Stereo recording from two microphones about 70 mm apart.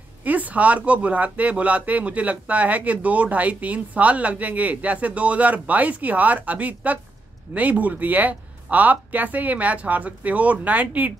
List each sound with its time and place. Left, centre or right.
0.2 s speech: right